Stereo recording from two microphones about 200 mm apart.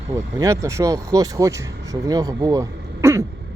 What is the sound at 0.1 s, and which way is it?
Speech, 15° right (ahead or behind).